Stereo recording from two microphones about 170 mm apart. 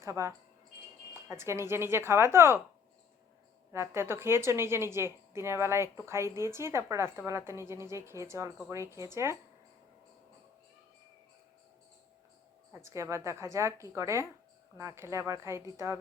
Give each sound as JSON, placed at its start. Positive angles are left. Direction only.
{"t": 0.0, "sound": "a woman's voice", "side_deg": -15}
{"t": 3.7, "sound": "a woman's voice", "side_deg": -15}
{"t": 12.8, "sound": "a woman's voice", "side_deg": -15}